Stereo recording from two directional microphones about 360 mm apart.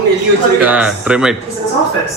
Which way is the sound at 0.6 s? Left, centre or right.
Centre.